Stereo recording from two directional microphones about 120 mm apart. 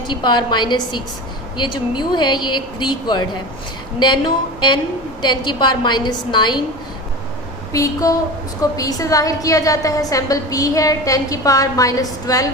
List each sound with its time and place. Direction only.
0.1 s speech: 40° left (ahead or behind)
7.7 s a woman's voice: 30° left (ahead or behind)